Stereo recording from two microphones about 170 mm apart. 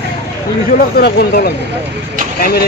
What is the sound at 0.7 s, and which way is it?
Speech, 70° left (ahead or behind).